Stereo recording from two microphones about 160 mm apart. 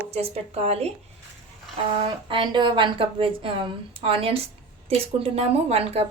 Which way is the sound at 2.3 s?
30° right (ahead or behind).